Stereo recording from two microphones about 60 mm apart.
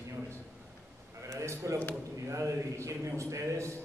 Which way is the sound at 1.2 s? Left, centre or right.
Right.